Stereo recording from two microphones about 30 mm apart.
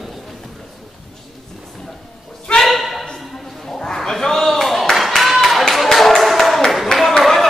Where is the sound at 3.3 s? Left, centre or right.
Centre.